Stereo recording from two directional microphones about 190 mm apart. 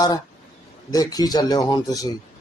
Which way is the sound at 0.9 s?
20° left (ahead or behind).